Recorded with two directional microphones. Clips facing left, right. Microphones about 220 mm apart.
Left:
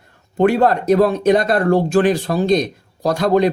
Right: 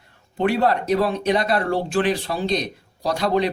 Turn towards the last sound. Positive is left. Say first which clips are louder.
# left 6 dB
turn(degrees=45)  # may be behind; listen again after turning